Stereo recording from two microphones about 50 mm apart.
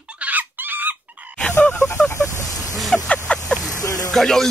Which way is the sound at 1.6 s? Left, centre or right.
Left.